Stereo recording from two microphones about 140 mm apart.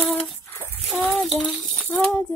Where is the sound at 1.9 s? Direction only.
10° left (ahead or behind).